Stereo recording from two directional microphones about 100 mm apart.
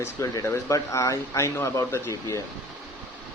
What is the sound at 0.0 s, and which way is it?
Speech, 30° left (ahead or behind).